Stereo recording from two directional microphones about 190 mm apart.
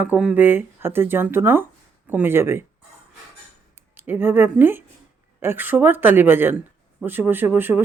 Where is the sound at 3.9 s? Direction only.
10° right (ahead or behind).